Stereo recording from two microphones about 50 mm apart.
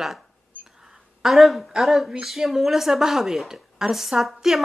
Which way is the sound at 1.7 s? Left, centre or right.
Centre.